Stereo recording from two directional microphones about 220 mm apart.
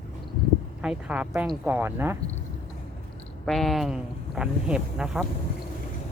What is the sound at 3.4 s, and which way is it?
Speech, centre (ahead or behind).